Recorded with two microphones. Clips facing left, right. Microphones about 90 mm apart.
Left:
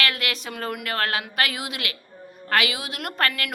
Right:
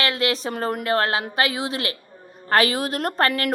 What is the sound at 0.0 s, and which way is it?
A woman's voice, 30° right (ahead or behind).